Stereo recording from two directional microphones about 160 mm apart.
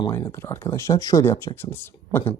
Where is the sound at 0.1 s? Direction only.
15° left (ahead or behind).